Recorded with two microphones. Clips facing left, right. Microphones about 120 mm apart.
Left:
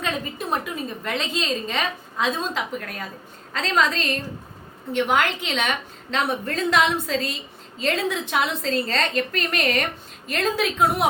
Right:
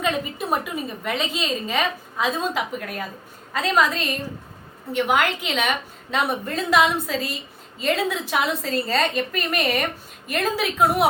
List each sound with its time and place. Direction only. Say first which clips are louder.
0.0 s a woman's voice: right 3 dB; 5° right (ahead or behind)